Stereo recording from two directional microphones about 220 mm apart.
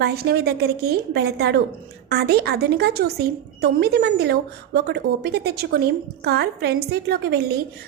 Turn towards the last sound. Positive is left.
turn(degrees=-50)  # may be behind; listen again after turning